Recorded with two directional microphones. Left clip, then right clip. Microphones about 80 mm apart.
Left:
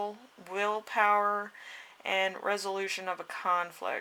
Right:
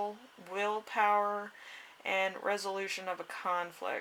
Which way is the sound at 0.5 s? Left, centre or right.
Left.